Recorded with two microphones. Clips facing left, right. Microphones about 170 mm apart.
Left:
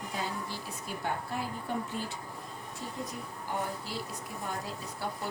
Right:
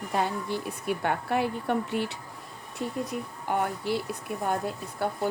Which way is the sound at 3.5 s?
65° right (ahead or behind).